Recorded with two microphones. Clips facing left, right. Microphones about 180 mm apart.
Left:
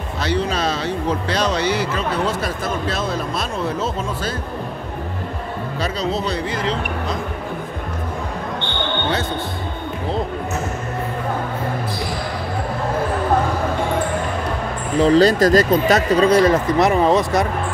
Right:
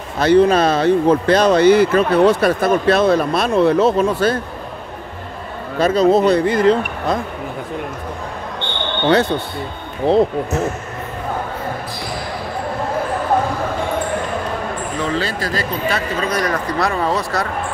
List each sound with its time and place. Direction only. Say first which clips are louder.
0.2 s speech: right 9 dB; 50° right (ahead or behind)
5.8 s speech: right 11 dB; 50° right (ahead or behind)
10.1 s speech: right 11 dB; 65° right (ahead or behind)
15.0 s speech: left 11 dB; 35° left (ahead or behind)
16.3 s speech: left 5 dB; 25° left (ahead or behind)